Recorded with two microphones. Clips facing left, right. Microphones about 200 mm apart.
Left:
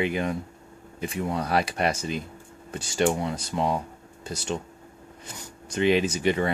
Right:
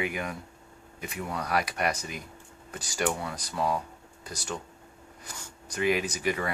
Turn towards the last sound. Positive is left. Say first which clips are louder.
# left 6 dB
turn(degrees=25)  # may be behind; listen again after turning